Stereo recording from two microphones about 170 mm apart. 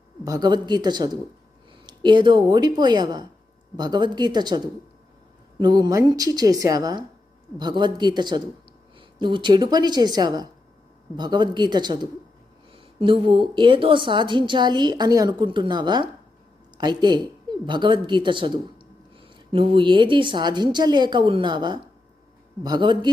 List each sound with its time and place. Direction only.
0.3 s a woman's voice: 25° right (ahead or behind)